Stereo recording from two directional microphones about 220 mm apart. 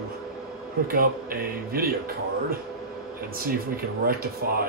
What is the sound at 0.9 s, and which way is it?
Speech, 40° right (ahead or behind).